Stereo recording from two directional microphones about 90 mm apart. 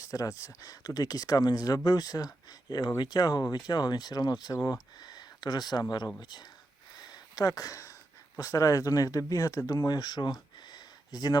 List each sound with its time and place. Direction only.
0.0 s speech: 40° left (ahead or behind)
7.0 s a sound: 45° left (ahead or behind)
8.4 s speech: 40° left (ahead or behind)